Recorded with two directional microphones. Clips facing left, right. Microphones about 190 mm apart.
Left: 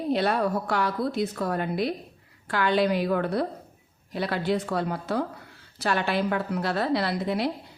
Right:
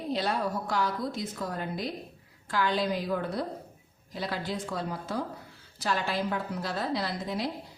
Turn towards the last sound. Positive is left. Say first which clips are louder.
# left 6 dB
turn(degrees=65)  # may be behind; listen again after turning